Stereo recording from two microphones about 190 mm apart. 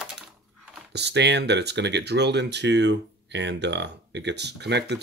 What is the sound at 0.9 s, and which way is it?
Speech, 65° right (ahead or behind).